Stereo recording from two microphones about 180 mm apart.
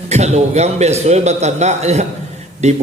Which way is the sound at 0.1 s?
40° right (ahead or behind).